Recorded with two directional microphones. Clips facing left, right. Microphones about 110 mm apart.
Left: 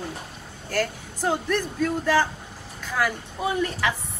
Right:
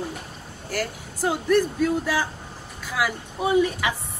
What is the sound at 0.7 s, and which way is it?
Speech, 10° right (ahead or behind).